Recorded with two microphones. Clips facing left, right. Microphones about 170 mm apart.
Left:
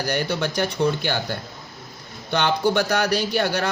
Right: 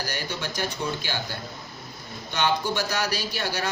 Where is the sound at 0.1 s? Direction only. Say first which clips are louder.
Left 8 dB; 65° left (ahead or behind).